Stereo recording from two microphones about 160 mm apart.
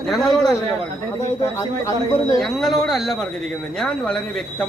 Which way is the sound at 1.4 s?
20° left (ahead or behind).